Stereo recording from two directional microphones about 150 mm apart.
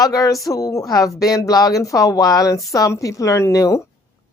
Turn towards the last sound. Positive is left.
turn(degrees=20)  # may be behind; listen again after turning